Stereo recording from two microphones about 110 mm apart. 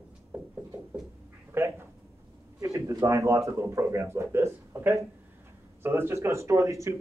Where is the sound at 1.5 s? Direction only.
25° right (ahead or behind).